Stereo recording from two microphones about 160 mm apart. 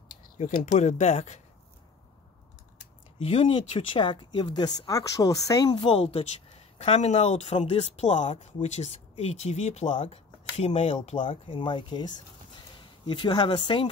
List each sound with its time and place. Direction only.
0.4 s speech: 50° left (ahead or behind)
3.2 s speech: 35° left (ahead or behind)